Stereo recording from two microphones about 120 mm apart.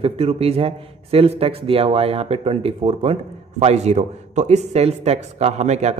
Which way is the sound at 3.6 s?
65° right (ahead or behind).